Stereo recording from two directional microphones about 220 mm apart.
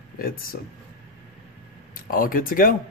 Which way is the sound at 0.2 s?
40° left (ahead or behind).